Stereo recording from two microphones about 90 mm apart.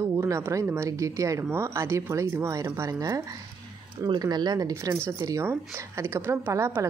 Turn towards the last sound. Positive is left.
turn(degrees=-25)  # may be behind; listen again after turning